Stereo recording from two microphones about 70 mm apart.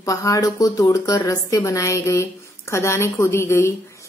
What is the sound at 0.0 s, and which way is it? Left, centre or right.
A woman's voice, left.